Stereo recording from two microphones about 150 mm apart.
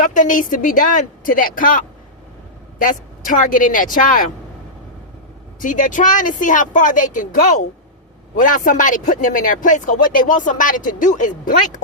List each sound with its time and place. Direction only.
0.0 s speech: 60° left (ahead or behind)
5.5 s speech: 60° left (ahead or behind)